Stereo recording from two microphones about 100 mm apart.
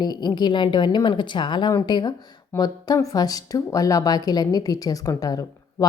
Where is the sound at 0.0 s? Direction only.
45° left (ahead or behind).